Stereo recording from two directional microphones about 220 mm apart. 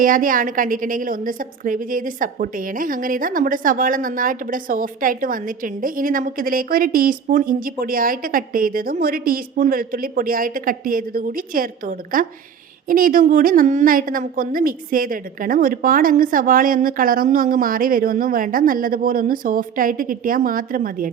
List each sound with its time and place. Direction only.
0.0 s a woman's voice: 40° right (ahead or behind)